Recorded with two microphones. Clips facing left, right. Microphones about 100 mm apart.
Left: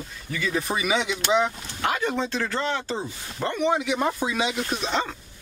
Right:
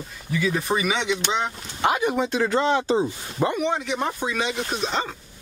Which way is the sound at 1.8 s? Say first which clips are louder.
Right 4 dB; 20° right (ahead or behind).